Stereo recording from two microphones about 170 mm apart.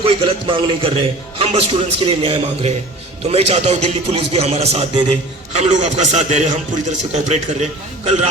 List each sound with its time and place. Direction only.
0.0 s a man's voice: 30° right (ahead or behind)